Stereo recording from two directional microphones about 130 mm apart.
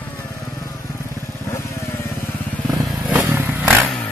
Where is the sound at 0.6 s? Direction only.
25° left (ahead or behind).